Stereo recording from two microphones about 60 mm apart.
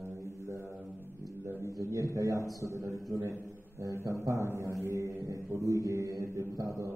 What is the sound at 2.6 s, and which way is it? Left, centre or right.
Speech, right.